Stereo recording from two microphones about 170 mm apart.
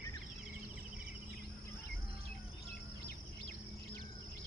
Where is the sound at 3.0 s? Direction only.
70° left (ahead or behind).